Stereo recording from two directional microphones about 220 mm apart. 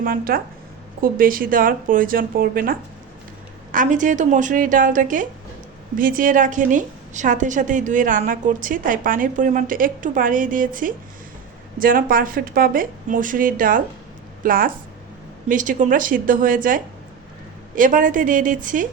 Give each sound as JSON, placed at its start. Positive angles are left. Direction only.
{"t": 0.0, "sound": "a woman's voice", "side_deg": -40}